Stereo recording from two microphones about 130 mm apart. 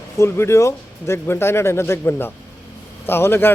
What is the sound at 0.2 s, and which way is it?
Speech, 20° left (ahead or behind).